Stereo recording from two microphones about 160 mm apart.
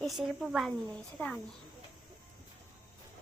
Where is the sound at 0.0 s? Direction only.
Centre (ahead or behind).